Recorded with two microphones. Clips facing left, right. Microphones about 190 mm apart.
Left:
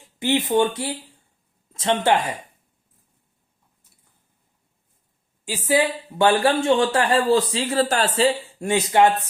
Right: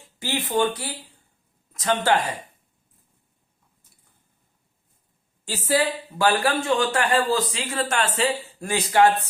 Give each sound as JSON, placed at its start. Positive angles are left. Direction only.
{"t": 0.2, "sound": "speech", "side_deg": 20}
{"t": 5.5, "sound": "speech", "side_deg": 15}